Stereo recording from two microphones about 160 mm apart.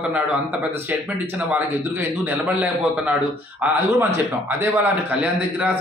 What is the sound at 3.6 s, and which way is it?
A man's voice, 15° right (ahead or behind).